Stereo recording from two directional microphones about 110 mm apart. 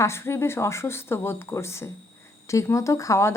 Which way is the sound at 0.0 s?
25° left (ahead or behind).